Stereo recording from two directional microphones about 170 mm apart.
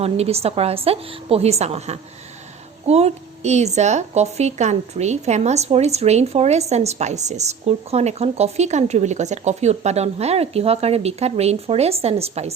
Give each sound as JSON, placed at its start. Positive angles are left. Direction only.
{"t": 0.0, "sound": "a woman's voice", "side_deg": -35}